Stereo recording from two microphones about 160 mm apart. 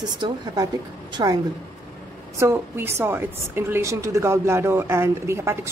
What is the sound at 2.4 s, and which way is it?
A woman's voice, 15° right (ahead or behind).